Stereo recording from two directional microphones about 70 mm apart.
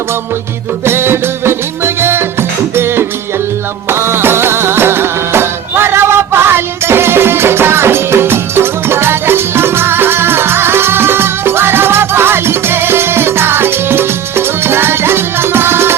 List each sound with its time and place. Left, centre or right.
0.9 s music: right